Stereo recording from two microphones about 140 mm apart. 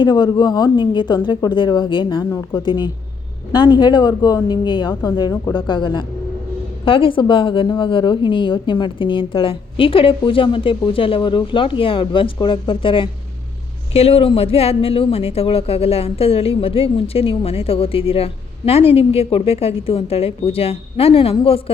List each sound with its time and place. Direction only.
0.0 s a woman's voice: 30° left (ahead or behind)